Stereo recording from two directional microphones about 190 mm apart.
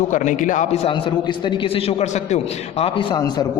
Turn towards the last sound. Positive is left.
turn(degrees=30)  # may be behind; listen again after turning